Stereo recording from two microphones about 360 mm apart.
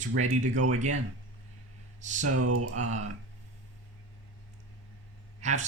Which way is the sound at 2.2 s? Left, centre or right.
Right.